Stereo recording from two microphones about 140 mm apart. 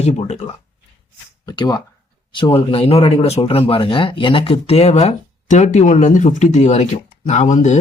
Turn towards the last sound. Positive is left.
turn(degrees=55)  # may be behind; listen again after turning